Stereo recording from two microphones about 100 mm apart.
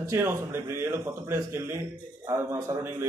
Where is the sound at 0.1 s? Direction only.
25° right (ahead or behind).